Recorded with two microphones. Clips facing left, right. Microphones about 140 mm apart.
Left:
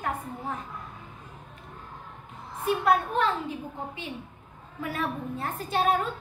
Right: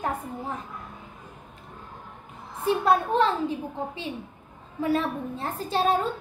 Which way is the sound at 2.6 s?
30° right (ahead or behind).